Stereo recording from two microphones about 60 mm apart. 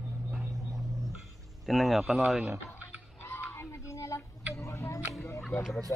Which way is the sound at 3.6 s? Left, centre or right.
Left.